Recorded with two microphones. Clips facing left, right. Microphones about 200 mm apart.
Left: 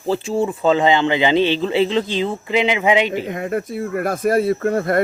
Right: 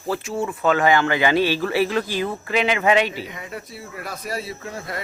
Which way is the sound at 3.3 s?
50° left (ahead or behind).